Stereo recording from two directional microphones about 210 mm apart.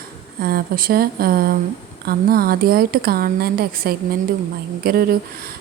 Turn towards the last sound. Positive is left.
turn(degrees=-45)  # may be behind; listen again after turning